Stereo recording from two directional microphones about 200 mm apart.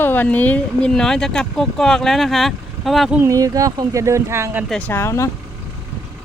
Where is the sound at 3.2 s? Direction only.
15° right (ahead or behind).